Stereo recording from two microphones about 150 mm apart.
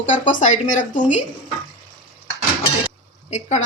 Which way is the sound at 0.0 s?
55° left (ahead or behind).